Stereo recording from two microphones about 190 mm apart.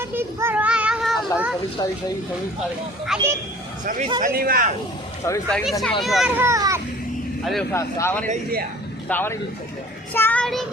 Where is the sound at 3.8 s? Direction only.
45° right (ahead or behind).